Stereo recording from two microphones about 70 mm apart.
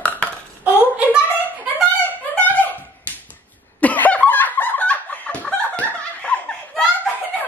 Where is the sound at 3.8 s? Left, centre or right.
Left.